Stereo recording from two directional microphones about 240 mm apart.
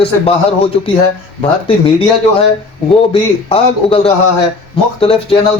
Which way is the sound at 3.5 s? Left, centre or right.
Left.